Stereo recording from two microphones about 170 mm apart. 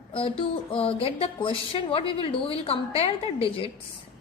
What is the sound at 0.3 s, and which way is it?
A woman's voice, 30° left (ahead or behind).